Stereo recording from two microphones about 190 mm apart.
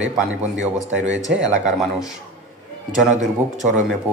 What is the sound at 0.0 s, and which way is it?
Speech, 5° right (ahead or behind).